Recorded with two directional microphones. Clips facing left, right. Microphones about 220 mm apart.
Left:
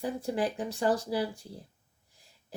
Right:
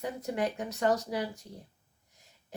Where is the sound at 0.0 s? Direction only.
30° left (ahead or behind).